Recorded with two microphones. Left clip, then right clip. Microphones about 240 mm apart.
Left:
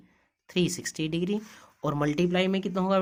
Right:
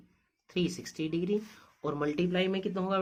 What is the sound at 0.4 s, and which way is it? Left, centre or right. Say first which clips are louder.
Speech: left 5 dB; left.